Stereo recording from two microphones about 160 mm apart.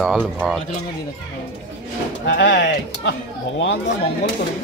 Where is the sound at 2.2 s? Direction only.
90° left.